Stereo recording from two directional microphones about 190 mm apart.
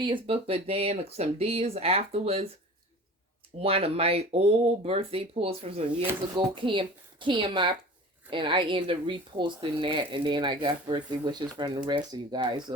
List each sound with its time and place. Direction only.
0.0 s speech: 25° right (ahead or behind)
3.6 s speech: 30° right (ahead or behind)